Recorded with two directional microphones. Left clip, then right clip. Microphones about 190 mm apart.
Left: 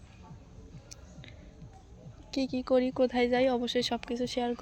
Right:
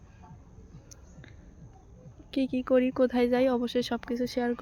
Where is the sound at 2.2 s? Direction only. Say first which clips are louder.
Right 2 dB; 30° right (ahead or behind).